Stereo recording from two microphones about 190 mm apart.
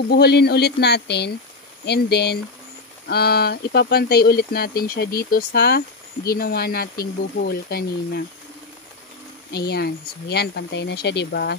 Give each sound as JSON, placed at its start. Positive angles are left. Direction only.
{"t": 0.1, "sound": "speech", "side_deg": 55}
{"t": 9.5, "sound": "speech", "side_deg": 55}